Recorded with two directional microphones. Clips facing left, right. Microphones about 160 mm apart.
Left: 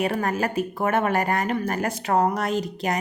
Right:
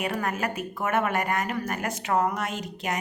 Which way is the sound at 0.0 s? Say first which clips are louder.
Left 4 dB; 35° left (ahead or behind).